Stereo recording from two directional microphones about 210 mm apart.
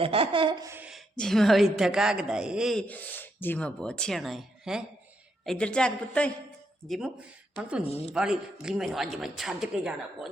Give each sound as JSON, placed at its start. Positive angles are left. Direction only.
{"t": 0.0, "sound": "laughter", "side_deg": -25}
{"t": 0.7, "sound": "a woman's voice", "side_deg": -5}
{"t": 7.9, "sound": "speech", "side_deg": 30}
{"t": 8.1, "sound": "a woman's voice", "side_deg": -5}